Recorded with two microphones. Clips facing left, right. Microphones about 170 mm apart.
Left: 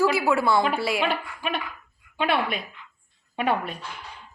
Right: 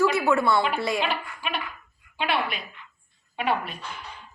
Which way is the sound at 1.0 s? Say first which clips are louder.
Left 2 dB; 50° left (ahead or behind).